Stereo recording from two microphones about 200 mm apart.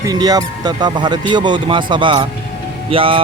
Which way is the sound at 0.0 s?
20° right (ahead or behind).